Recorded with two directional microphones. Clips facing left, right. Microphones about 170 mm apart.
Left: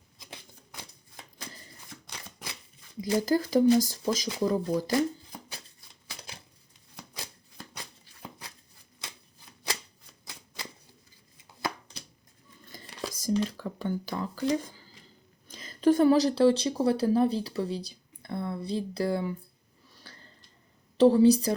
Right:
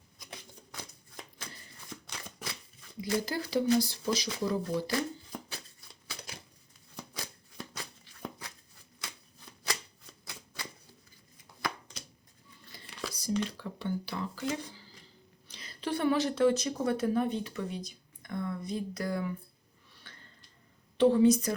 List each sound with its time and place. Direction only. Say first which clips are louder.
3.0 s speech: left 6 dB; 45° left (ahead or behind)
12.7 s whispering: left 3 dB; 40° left (ahead or behind)
15.4 s speech: left 12 dB; 45° left (ahead or behind); by 19.4 s 30° left (ahead or behind)
19.9 s a sound: left 3 dB; 40° left (ahead or behind)
21.0 s speech: left 4 dB; 35° left (ahead or behind)